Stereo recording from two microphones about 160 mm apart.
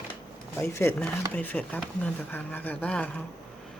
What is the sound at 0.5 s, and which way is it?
Speech, 15° left (ahead or behind).